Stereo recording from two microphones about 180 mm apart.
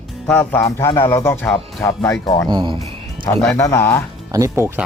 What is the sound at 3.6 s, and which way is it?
Speech, 15° left (ahead or behind).